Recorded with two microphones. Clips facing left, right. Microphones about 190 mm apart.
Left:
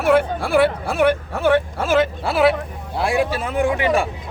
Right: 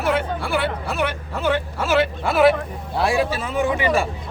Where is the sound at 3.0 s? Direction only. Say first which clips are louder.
Even; 15° left (ahead or behind).